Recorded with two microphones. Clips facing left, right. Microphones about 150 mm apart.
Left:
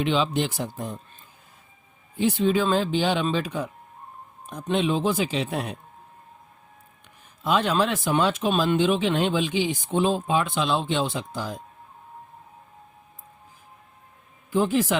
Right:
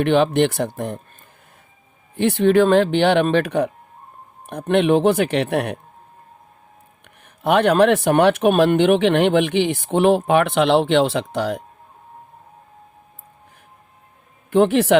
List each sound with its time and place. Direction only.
0.0 s speech: 60° right (ahead or behind)
2.1 s speech: 65° right (ahead or behind)
7.4 s speech: 65° right (ahead or behind)
14.5 s speech: 65° right (ahead or behind)